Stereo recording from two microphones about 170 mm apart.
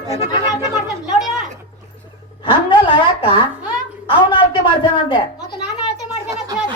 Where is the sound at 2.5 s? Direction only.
30° left (ahead or behind).